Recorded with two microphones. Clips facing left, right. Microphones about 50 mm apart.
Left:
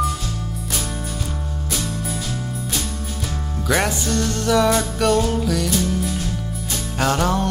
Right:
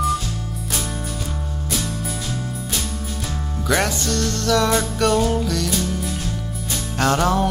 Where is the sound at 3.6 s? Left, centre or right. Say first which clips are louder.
Even; centre.